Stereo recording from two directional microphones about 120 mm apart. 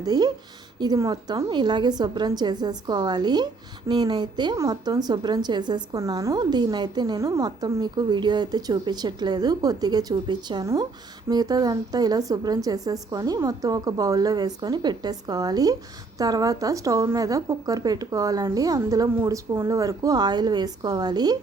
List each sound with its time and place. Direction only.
0.0 s a woman's voice: 35° right (ahead or behind)